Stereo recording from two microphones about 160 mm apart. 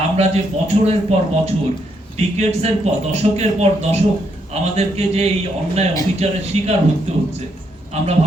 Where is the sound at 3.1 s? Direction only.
40° right (ahead or behind).